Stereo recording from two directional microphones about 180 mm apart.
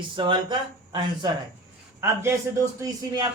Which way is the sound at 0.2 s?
25° right (ahead or behind).